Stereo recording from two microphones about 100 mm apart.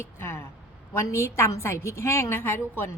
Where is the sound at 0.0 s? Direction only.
25° left (ahead or behind).